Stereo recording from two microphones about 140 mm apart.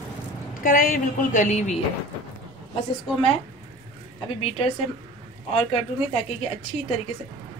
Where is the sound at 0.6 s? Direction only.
75° left (ahead or behind); by 1.8 s 55° left (ahead or behind).